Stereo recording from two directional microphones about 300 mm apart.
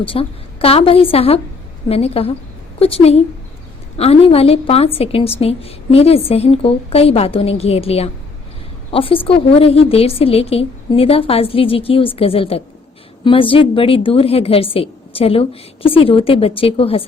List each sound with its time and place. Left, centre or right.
0.0 s a woman's voice: centre